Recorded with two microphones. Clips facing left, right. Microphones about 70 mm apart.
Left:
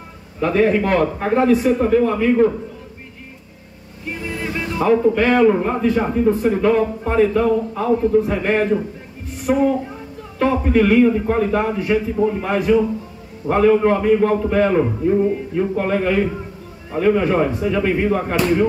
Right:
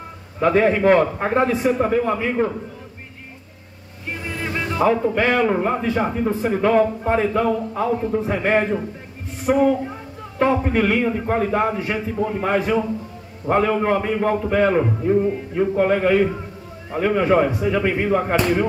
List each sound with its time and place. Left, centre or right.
0.4 s a man's voice: right
4.4 s a sound: centre
5.3 s a man's voice: centre; by 12.8 s right
13.5 s speech: centre